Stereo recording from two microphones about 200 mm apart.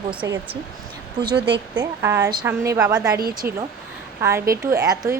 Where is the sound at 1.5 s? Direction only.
20° right (ahead or behind).